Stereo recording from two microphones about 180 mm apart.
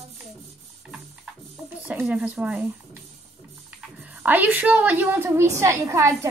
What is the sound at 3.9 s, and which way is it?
A woman's voice, 10° right (ahead or behind).